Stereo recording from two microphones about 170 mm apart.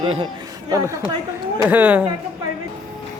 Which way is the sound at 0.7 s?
20° right (ahead or behind).